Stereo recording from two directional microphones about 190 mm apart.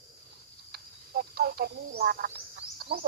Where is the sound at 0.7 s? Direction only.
55° right (ahead or behind).